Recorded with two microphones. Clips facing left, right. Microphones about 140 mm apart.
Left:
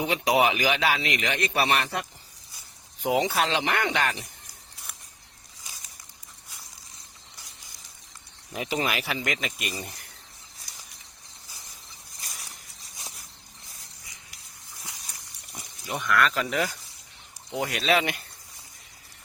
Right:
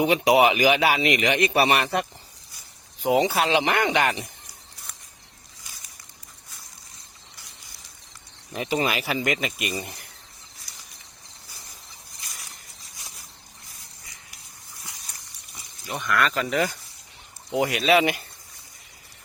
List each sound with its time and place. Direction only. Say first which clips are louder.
0.0 s speech: right 5 dB; 15° right (ahead or behind)
3.0 s speech: right 3 dB; centre (ahead or behind)
3.5 s speech: right 5 dB; 15° right (ahead or behind)
8.5 s speech: right 3 dB; 5° left (ahead or behind)
15.9 s speech: even; centre (ahead or behind)